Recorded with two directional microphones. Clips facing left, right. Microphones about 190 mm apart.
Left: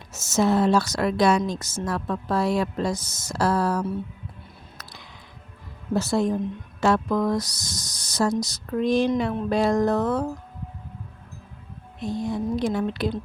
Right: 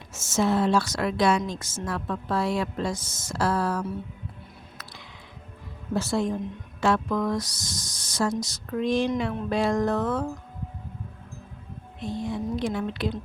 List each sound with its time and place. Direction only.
0.1 s a woman's voice: 40° left (ahead or behind)
4.8 s music: 40° left (ahead or behind)
5.9 s a woman's voice: 40° left (ahead or behind)
12.0 s a woman's voice: 40° left (ahead or behind)